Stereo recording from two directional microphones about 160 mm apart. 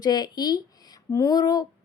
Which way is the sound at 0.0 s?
25° left (ahead or behind).